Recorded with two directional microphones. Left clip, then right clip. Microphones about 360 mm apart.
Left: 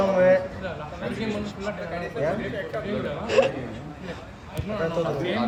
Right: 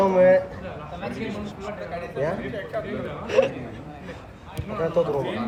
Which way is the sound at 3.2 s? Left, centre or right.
Centre.